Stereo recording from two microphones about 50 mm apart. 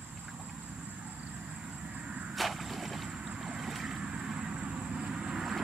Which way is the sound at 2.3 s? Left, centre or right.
Centre.